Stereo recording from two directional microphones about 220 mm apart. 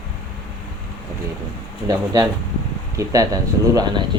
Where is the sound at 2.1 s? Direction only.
15° right (ahead or behind).